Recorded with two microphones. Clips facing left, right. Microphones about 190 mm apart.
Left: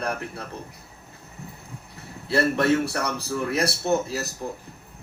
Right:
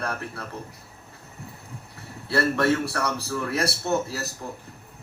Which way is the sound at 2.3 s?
20° left (ahead or behind).